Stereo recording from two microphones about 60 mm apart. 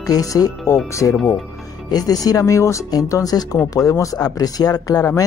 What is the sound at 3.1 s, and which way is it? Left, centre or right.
Speech, left.